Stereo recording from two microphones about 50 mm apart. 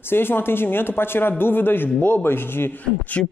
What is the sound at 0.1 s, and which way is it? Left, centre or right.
A man's voice, left.